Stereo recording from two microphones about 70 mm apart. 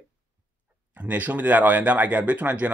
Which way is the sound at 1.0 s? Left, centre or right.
Right.